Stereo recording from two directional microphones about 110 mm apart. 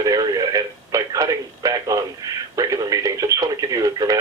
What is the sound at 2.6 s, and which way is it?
Radio, 35° right (ahead or behind).